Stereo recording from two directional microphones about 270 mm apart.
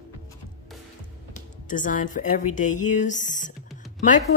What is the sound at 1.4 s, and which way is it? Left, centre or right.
Speech, left.